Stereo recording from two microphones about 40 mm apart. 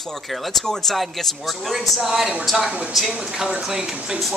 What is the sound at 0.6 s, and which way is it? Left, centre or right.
Speech, centre.